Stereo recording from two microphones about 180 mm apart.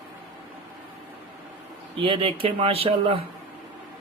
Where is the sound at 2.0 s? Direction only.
30° right (ahead or behind).